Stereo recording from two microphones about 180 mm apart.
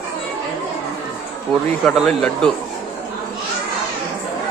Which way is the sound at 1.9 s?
Centre (ahead or behind).